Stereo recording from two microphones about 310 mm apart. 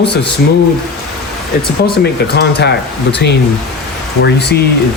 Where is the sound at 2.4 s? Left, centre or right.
Left.